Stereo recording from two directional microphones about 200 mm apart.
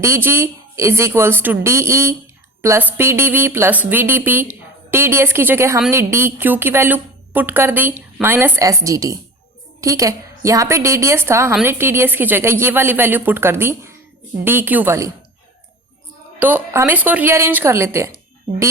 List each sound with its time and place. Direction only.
0.0 s a woman's voice: 15° right (ahead or behind)
16.4 s a woman's voice: 10° right (ahead or behind)